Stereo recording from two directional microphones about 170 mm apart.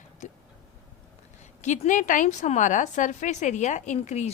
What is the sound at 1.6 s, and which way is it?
A woman's voice, 45° left (ahead or behind).